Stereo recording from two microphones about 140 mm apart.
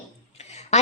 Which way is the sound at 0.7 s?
55° left (ahead or behind).